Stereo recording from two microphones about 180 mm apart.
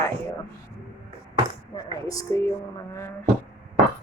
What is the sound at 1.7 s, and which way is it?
Speech, 20° left (ahead or behind).